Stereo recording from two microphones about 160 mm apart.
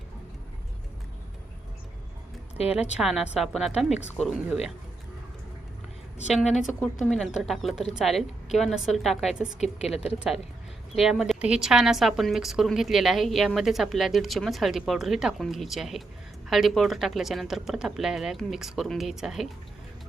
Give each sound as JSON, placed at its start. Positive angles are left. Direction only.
{"t": 2.6, "sound": "a woman's voice", "side_deg": 40}
{"t": 3.0, "sound": "a woman's voice", "side_deg": 0}
{"t": 6.3, "sound": "a woman's voice", "side_deg": 0}
{"t": 9.6, "sound": "a woman's voice", "side_deg": 40}
{"t": 10.0, "sound": "a woman's voice", "side_deg": -5}